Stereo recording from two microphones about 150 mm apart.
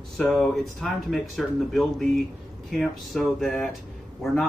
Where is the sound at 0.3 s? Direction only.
Centre (ahead or behind).